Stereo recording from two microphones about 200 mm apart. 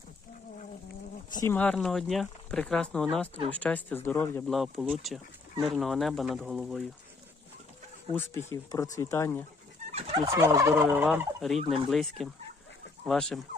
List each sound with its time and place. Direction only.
1.3 s speech: 15° left (ahead or behind)
1.5 s speech: 5° left (ahead or behind)
8.1 s speech: 10° left (ahead or behind)
9.9 s turkey: 30° right (ahead or behind)
10.2 s fowl: 15° right (ahead or behind)
11.6 s speech: 25° right (ahead or behind)
11.9 s speech: centre (ahead or behind)